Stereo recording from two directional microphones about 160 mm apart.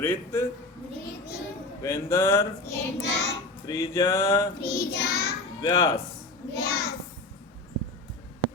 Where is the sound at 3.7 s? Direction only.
20° left (ahead or behind).